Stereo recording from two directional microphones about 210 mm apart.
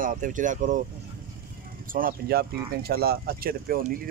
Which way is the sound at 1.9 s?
45° right (ahead or behind).